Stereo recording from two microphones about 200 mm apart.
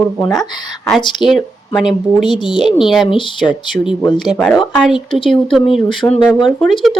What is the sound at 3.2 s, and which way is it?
Speech, 25° left (ahead or behind).